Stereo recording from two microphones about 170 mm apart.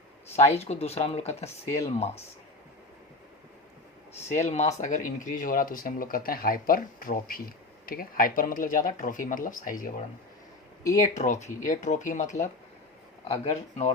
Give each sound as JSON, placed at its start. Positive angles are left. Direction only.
{"t": 0.3, "sound": "speech", "side_deg": 40}
{"t": 1.6, "sound": "speech", "side_deg": 15}
{"t": 4.4, "sound": "speech", "side_deg": 40}
{"t": 10.8, "sound": "speech", "side_deg": 20}
{"t": 11.1, "sound": "speech", "side_deg": 45}
{"t": 13.2, "sound": "speech", "side_deg": 35}